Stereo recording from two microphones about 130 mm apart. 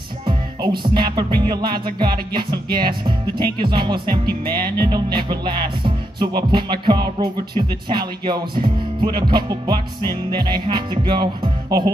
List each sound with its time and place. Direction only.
0.2 s music: 35° right (ahead or behind)